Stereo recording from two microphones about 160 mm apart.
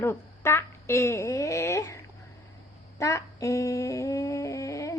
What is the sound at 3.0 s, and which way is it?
Music, 20° left (ahead or behind).